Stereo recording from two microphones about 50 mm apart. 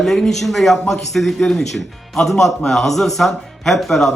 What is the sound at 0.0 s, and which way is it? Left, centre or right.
A man's voice, centre.